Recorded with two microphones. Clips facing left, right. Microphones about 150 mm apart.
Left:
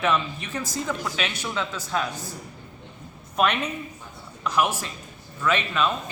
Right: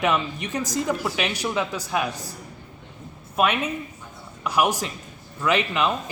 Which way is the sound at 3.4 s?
5° right (ahead or behind).